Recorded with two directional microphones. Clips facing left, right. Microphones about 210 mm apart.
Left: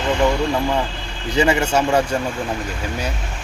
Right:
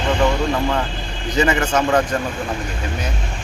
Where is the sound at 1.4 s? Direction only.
10° left (ahead or behind).